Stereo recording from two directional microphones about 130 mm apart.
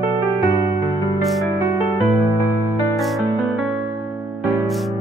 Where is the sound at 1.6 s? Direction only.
20° right (ahead or behind).